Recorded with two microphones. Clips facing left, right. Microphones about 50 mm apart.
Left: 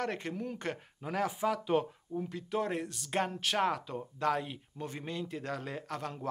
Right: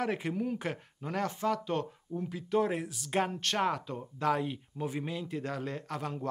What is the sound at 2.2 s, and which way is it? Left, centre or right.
Speech, centre.